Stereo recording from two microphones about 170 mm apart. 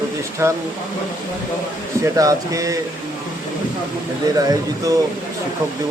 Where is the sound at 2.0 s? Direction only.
20° right (ahead or behind).